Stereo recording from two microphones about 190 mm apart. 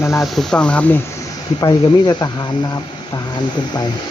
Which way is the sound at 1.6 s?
20° left (ahead or behind).